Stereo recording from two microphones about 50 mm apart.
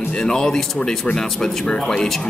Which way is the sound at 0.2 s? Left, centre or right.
Centre.